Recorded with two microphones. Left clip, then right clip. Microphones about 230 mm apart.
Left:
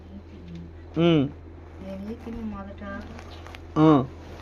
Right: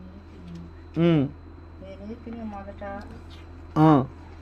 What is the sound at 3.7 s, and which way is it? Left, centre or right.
Speech, right.